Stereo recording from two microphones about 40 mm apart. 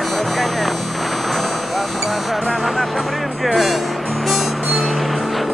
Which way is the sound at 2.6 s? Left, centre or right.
Centre.